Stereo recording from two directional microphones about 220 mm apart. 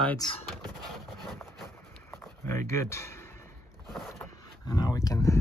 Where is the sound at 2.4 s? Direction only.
15° left (ahead or behind).